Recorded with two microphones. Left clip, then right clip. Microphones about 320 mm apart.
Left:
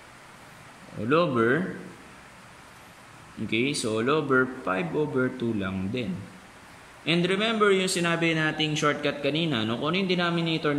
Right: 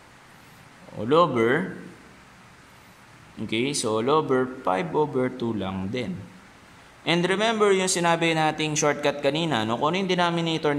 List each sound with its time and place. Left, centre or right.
1.0 s speech: centre
3.4 s speech: centre
7.1 s speech: centre